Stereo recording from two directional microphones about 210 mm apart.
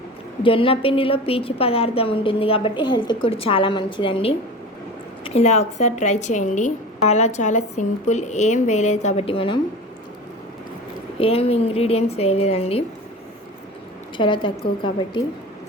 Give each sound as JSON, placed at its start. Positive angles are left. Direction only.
{"t": 0.4, "sound": "a woman's voice", "side_deg": 25}
{"t": 11.2, "sound": "a woman's voice", "side_deg": 25}
{"t": 14.2, "sound": "a woman's voice", "side_deg": 25}